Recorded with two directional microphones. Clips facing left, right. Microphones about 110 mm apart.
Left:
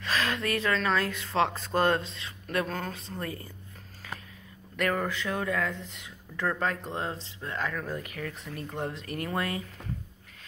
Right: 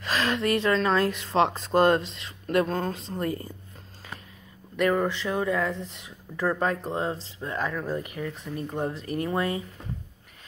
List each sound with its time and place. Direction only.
0.0 s speech: 30° right (ahead or behind)
5.0 s speech: 25° right (ahead or behind)
6.3 s speech: 10° right (ahead or behind)
6.7 s speech: 30° right (ahead or behind)
7.3 s speech: 15° right (ahead or behind)
7.9 s speech: 25° right (ahead or behind)
8.8 s speech: 25° right (ahead or behind)